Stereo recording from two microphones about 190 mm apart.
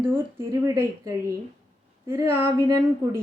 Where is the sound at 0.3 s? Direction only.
15° right (ahead or behind).